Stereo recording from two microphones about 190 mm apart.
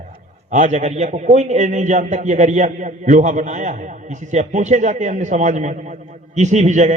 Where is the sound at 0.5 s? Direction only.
40° right (ahead or behind).